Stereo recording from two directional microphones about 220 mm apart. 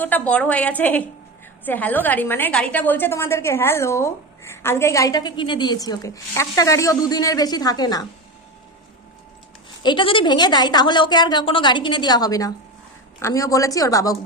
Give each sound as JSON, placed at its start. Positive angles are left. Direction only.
{"t": 0.0, "sound": "a woman's voice", "side_deg": 5}
{"t": 9.8, "sound": "a woman's voice", "side_deg": 20}